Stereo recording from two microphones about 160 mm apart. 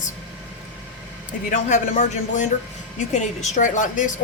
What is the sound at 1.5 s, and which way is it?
A woman's voice, 50° left (ahead or behind).